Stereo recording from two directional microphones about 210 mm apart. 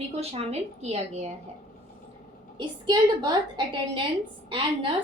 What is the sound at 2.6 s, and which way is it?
A woman's voice, 20° right (ahead or behind).